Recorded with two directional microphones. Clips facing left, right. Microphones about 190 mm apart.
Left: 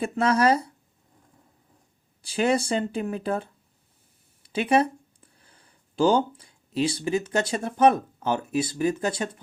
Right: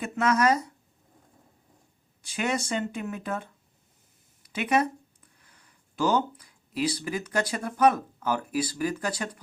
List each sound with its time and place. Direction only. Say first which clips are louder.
0.0 s speech: left 3 dB; 30° left (ahead or behind)
2.2 s speech: left 6 dB; 30° left (ahead or behind)